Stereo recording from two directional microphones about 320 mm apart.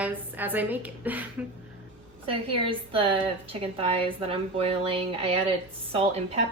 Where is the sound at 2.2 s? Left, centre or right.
Centre.